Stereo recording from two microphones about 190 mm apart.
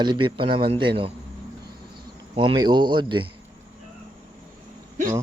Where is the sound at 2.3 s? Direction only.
25° right (ahead or behind).